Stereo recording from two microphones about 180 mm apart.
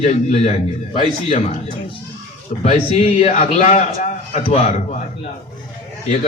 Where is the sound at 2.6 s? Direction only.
35° left (ahead or behind).